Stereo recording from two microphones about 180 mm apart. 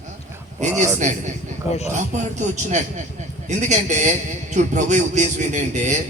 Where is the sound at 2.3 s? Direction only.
40° right (ahead or behind).